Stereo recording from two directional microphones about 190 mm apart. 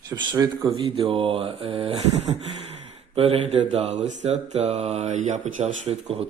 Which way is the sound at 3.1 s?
30° right (ahead or behind).